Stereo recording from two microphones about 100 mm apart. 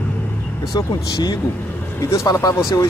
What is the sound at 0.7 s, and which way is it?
Speech, 35° left (ahead or behind).